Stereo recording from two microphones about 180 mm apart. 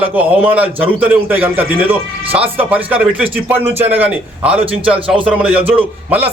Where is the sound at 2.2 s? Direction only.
30° right (ahead or behind).